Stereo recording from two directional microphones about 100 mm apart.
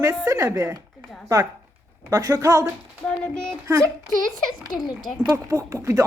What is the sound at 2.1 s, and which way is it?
Speech, 35° right (ahead or behind).